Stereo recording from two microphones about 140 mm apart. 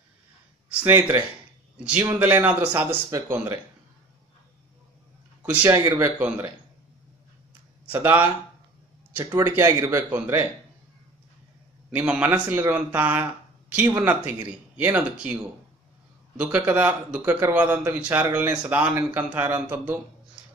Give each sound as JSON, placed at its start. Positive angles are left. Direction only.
{"t": 0.8, "sound": "a man's voice", "side_deg": -15}
{"t": 5.4, "sound": "speech", "side_deg": -10}
{"t": 5.7, "sound": "speech", "side_deg": -25}
{"t": 6.1, "sound": "a man's voice", "side_deg": -10}
{"t": 7.9, "sound": "a man's voice", "side_deg": -15}
{"t": 11.9, "sound": "a man's voice", "side_deg": -10}
{"t": 16.3, "sound": "a man's voice", "side_deg": -10}